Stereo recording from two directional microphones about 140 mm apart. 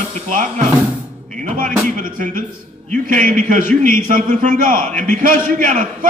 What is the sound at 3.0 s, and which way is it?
Speech, 70° right (ahead or behind).